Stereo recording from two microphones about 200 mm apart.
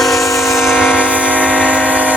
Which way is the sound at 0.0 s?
Centre (ahead or behind).